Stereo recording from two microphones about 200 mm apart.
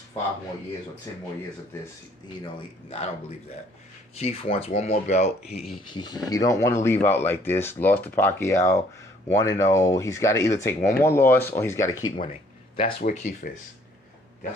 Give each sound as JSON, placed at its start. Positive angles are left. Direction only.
{"t": 2.4, "sound": "speech", "side_deg": 30}
{"t": 4.2, "sound": "speech", "side_deg": 30}
{"t": 5.9, "sound": "speech", "side_deg": 20}
{"t": 12.2, "sound": "speech", "side_deg": 30}